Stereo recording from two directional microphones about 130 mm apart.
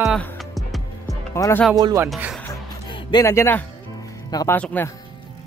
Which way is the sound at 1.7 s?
30° right (ahead or behind).